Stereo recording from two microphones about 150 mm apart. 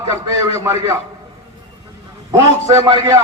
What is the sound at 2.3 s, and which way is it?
Speech, 20° right (ahead or behind).